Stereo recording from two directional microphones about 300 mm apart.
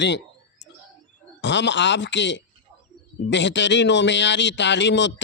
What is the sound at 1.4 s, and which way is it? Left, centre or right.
Speech, left.